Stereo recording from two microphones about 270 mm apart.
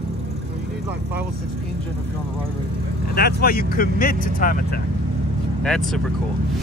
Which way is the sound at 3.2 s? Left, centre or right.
Left.